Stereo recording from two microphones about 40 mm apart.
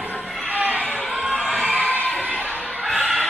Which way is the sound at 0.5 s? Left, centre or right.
Right.